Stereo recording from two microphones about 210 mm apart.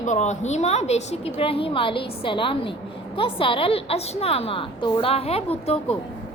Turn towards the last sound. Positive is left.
turn(degrees=30)  # may be behind; listen again after turning